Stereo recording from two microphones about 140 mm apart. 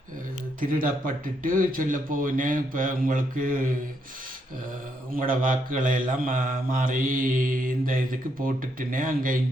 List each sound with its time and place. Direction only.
0.6 s mantra: 80° right
5.1 s mantra: 80° right